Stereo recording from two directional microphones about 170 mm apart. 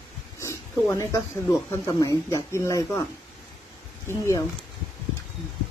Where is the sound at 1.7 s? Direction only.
20° left (ahead or behind).